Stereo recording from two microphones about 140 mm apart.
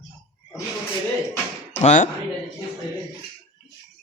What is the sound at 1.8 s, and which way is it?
Speech, 55° left (ahead or behind).